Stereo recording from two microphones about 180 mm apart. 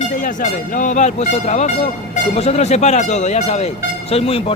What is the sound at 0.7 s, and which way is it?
Speech, 45° left (ahead or behind).